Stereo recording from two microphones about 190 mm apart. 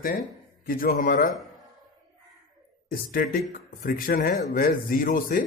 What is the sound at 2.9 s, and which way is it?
Speech, 50° left (ahead or behind).